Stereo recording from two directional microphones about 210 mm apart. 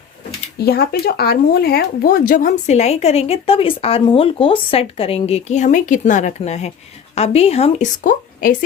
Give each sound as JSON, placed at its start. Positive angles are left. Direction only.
{"t": 0.6, "sound": "speech", "side_deg": 50}